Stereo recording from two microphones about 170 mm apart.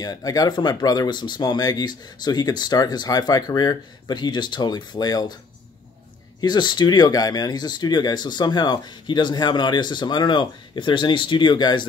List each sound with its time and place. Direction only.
0.0 s speech: 20° left (ahead or behind)
6.4 s speech: 25° left (ahead or behind)